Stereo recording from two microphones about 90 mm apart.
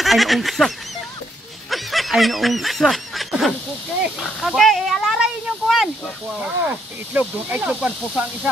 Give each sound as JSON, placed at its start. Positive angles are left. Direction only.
{"t": 0.0, "sound": "fowl", "side_deg": 0}
{"t": 1.7, "sound": "speech", "side_deg": 0}
{"t": 6.4, "sound": "speech", "side_deg": -20}